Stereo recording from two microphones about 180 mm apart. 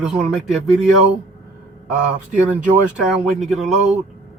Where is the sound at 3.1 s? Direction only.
Centre (ahead or behind).